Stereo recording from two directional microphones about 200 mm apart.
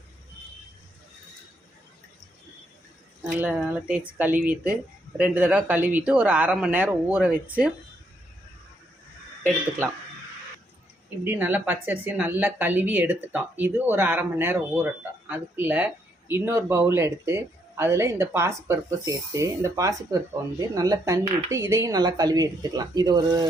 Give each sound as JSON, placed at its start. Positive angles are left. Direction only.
{"t": 3.2, "sound": "speech", "side_deg": -5}
{"t": 11.2, "sound": "speech", "side_deg": -10}